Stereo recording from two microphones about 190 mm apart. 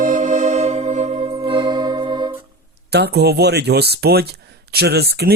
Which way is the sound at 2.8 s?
60° right (ahead or behind).